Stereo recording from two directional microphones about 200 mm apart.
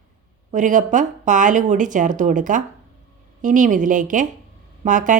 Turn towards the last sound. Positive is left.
turn(degrees=-40)  # may be behind; listen again after turning